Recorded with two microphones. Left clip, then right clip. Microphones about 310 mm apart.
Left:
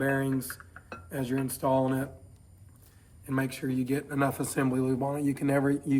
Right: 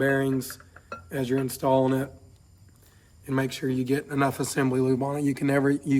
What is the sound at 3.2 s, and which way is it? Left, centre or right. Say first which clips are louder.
Speech: right 4 dB; right.